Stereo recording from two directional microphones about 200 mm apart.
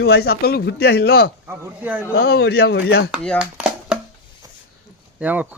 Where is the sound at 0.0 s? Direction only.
50° left (ahead or behind).